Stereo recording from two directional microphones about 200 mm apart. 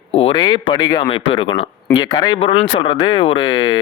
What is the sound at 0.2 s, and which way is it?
Speech, 25° left (ahead or behind).